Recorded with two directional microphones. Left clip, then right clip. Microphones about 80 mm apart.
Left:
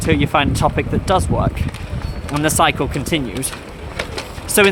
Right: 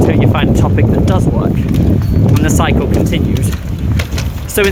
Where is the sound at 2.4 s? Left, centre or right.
Centre.